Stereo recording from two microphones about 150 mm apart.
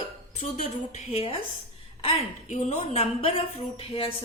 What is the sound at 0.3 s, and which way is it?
A woman's voice, 55° left (ahead or behind).